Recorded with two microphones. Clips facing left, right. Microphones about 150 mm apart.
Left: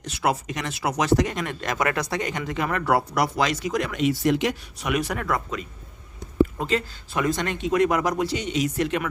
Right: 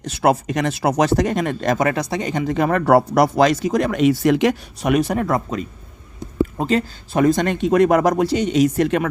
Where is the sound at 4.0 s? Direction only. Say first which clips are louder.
Right 6 dB; 70° right (ahead or behind).